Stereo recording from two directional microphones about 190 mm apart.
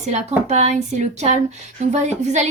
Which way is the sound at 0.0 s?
35° right (ahead or behind).